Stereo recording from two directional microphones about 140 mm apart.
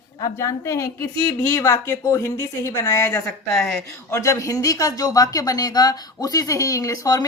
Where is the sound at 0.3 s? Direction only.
20° left (ahead or behind).